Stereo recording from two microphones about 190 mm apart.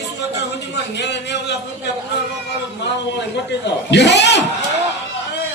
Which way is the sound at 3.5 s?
65° left (ahead or behind).